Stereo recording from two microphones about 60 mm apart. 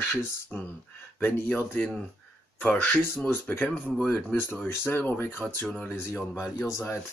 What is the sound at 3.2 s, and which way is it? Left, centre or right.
Speech, left.